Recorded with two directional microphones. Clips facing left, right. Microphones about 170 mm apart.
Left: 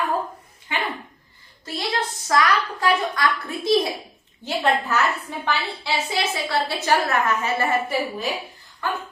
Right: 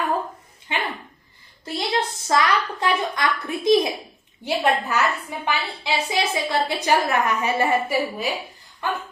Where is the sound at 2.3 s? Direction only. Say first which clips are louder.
Even; 25° right (ahead or behind).